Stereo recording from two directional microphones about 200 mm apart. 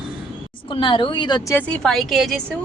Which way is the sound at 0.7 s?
25° left (ahead or behind).